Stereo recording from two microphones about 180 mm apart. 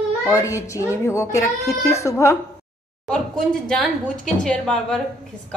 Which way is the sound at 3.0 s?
5° left (ahead or behind).